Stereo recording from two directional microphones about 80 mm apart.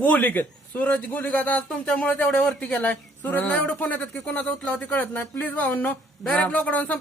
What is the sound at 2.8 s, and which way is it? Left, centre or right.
Speech, left.